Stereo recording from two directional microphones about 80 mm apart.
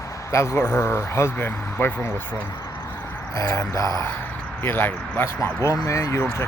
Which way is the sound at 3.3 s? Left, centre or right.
Left.